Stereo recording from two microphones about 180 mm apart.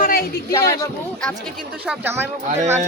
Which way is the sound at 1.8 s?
10° right (ahead or behind).